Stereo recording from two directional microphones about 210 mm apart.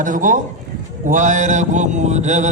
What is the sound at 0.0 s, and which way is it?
A man's voice, 40° right (ahead or behind).